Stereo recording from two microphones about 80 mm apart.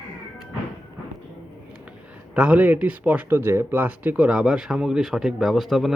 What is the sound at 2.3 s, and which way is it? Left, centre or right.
Speech, centre.